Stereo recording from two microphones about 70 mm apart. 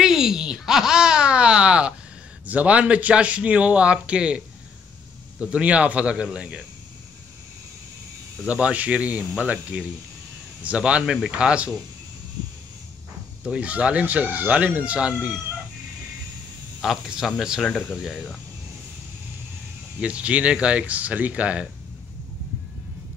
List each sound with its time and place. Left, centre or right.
0.0 s speech: centre
5.4 s speech: centre
8.5 s speech: centre
13.4 s speech: centre
16.8 s speech: centre
20.0 s speech: centre